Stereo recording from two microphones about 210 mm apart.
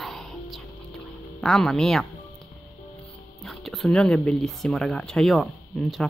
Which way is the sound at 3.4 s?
Centre (ahead or behind).